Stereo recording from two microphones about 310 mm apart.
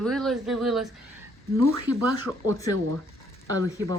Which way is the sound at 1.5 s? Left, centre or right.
Right.